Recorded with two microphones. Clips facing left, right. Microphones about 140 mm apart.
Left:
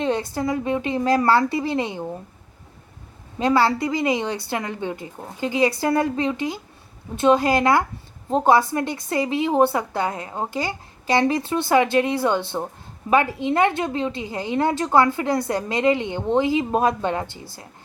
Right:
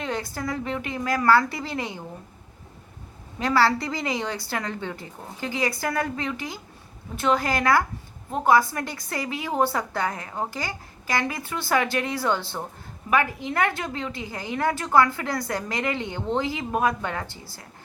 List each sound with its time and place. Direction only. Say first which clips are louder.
0.0 s a woman's voice: left 7 dB; 25° left (ahead or behind)
3.3 s a woman's voice: left 3 dB; 20° left (ahead or behind)